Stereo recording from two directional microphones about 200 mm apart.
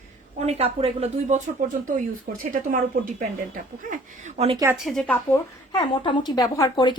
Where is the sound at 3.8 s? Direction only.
40° right (ahead or behind).